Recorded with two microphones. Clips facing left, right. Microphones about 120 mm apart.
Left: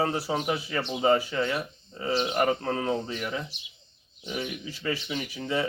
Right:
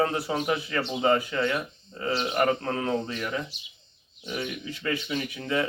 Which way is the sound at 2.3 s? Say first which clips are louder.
Right 1 dB; 15° left (ahead or behind).